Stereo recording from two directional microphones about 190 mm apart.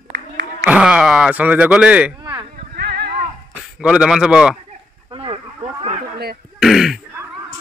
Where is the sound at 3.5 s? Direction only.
5° right (ahead or behind).